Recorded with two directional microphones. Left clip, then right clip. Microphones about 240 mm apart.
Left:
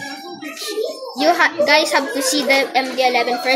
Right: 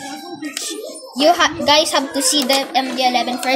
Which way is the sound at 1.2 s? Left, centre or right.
Right.